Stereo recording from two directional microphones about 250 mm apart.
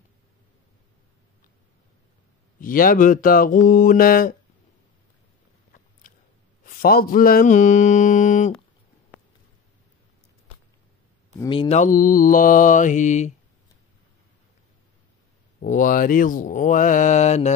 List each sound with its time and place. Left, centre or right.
2.6 s mantra: left
6.6 s mantra: left
11.3 s mantra: centre
15.6 s mantra: left